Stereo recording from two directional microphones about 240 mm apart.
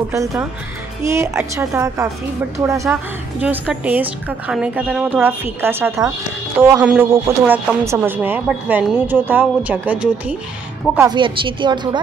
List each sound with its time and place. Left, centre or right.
1.0 s speech: centre
11.0 s speech: centre